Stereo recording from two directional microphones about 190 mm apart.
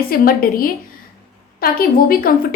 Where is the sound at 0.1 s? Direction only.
50° left (ahead or behind).